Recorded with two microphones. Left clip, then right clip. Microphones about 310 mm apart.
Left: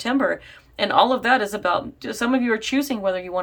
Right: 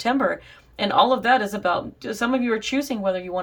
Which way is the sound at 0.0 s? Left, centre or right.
Centre.